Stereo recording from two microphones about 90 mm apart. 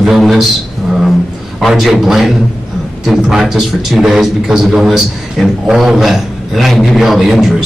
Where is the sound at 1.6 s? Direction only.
Centre (ahead or behind).